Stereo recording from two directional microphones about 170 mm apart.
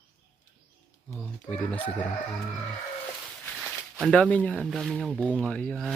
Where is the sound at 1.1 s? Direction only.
10° left (ahead or behind).